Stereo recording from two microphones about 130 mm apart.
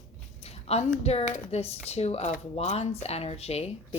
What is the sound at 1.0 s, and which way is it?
Speech, 60° left (ahead or behind).